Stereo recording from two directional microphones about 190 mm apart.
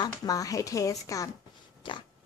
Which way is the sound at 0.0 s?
20° left (ahead or behind).